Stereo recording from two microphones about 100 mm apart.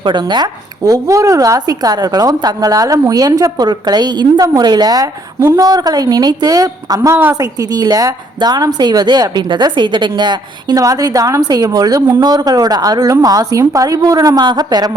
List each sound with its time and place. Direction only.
0.0 s a woman's voice: 50° right (ahead or behind)